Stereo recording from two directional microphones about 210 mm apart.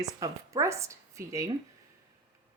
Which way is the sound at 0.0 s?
15° right (ahead or behind).